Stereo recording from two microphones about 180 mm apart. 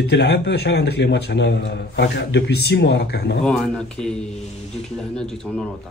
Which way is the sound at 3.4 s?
5° left (ahead or behind).